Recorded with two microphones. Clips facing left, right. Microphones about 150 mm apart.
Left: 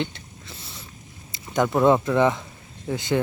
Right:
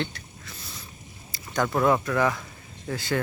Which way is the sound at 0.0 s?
25° left (ahead or behind).